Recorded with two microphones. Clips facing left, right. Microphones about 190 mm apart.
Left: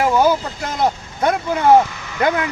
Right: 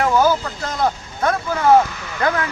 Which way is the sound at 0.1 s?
25° left (ahead or behind).